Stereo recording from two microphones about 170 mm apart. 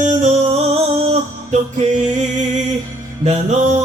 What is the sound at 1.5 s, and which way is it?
Music, 40° right (ahead or behind).